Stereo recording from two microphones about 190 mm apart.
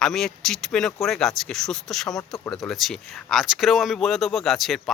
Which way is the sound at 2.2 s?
15° left (ahead or behind).